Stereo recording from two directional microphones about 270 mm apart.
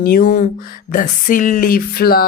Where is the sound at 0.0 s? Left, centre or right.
Left.